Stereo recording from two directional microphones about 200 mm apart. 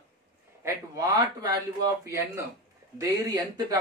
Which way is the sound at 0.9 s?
20° right (ahead or behind).